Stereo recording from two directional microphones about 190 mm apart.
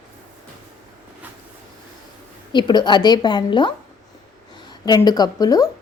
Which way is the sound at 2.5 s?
25° left (ahead or behind).